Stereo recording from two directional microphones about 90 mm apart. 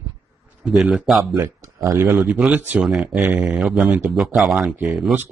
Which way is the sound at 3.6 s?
Centre (ahead or behind).